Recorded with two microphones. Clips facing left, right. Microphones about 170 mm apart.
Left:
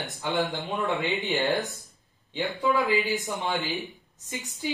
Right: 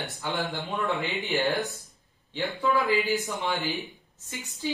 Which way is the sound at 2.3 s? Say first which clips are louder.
Even; 20° left (ahead or behind).